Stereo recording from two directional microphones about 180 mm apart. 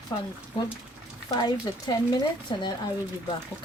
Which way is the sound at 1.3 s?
20° left (ahead or behind).